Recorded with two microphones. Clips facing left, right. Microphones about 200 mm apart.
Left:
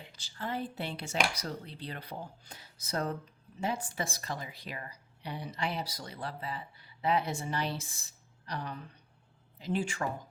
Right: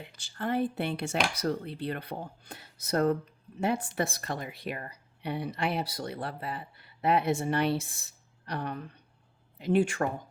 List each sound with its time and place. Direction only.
0.0 s speech: 55° right (ahead or behind)